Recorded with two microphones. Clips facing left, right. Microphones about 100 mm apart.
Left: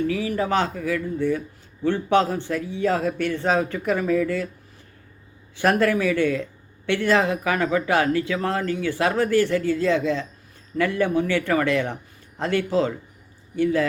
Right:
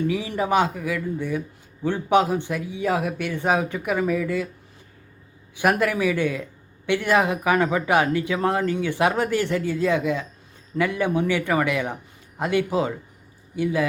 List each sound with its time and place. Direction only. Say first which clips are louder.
0.1 s speech: even; 20° right (ahead or behind)
5.5 s speech: left 1 dB; 15° right (ahead or behind)